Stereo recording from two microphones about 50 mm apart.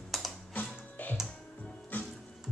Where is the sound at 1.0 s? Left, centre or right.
Left.